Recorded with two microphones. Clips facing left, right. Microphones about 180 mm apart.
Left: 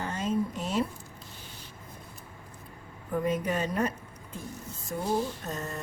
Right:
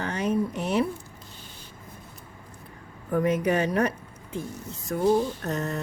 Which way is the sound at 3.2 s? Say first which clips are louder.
Right 5 dB; 80° right.